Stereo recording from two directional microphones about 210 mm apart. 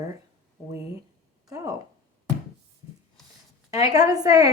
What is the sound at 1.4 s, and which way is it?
Speech, 15° right (ahead or behind).